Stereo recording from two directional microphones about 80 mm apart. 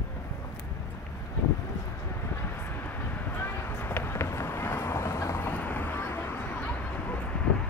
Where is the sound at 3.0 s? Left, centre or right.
Left.